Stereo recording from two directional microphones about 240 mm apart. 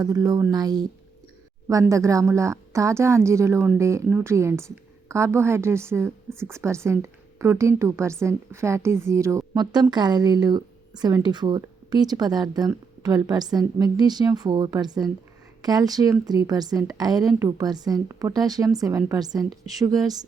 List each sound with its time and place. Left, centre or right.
0.0 s a woman's voice: centre